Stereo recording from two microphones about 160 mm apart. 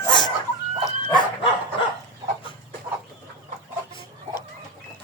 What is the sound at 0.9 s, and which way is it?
Dog, 30° left (ahead or behind).